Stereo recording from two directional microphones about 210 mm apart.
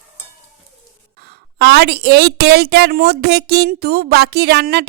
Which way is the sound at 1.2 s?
50° right (ahead or behind).